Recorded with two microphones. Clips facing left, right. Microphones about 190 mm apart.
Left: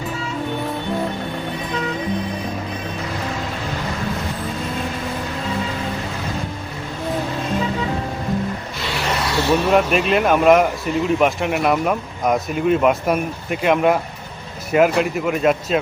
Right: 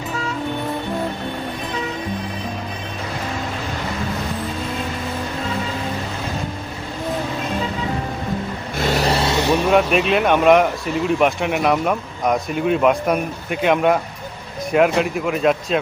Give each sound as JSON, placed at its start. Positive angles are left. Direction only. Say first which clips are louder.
{"t": 8.8, "sound": "vehicle", "louder": "right 6 dB", "side_deg": -40}
{"t": 9.6, "sound": "speech", "louder": "even", "side_deg": 0}